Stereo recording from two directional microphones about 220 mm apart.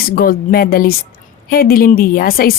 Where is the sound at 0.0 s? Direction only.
45° left (ahead or behind).